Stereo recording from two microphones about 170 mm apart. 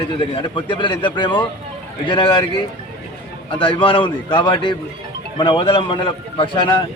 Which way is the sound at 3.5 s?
30° left (ahead or behind).